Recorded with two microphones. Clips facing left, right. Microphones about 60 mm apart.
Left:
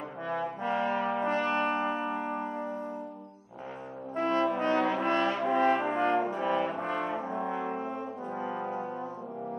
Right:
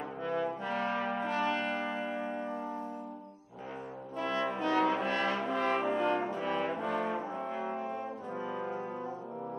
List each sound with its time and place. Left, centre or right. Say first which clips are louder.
0.6 s brass instrument: left 4 dB; left
4.2 s brass instrument: left 5 dB; left
6.3 s brass instrument: left 4 dB; left
6.8 s brass instrument: left 1 dB; left